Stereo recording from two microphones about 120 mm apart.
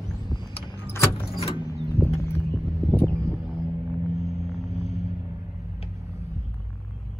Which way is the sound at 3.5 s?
10° left (ahead or behind).